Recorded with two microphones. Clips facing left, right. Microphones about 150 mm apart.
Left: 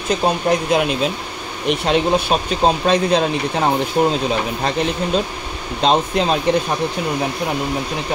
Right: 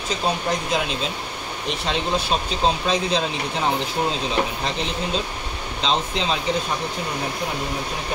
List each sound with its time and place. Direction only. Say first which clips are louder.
0.1 s speech: left 7 dB; 60° left (ahead or behind)